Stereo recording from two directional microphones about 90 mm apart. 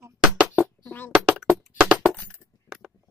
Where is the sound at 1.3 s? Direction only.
15° right (ahead or behind).